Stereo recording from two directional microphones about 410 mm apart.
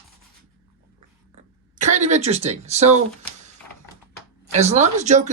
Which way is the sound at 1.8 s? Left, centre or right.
Centre.